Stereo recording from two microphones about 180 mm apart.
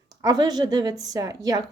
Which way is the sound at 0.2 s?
20° right (ahead or behind).